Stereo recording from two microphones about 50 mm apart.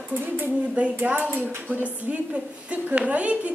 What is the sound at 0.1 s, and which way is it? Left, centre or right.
Speech, right.